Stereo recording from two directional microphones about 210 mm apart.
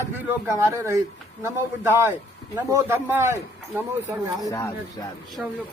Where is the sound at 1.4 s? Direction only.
10° right (ahead or behind).